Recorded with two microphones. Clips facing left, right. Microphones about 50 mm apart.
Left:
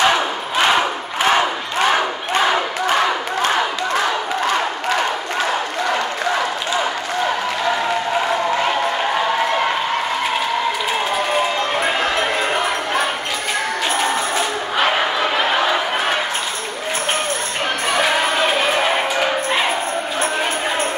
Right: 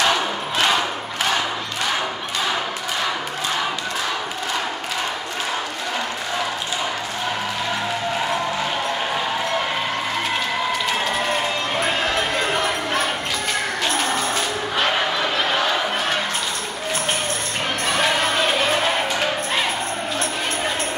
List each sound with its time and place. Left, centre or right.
0.0 s battle cry: left
12.4 s a sound: centre
14.8 s crowd: centre
17.9 s music: centre